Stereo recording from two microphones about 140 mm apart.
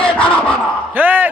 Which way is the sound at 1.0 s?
15° right (ahead or behind).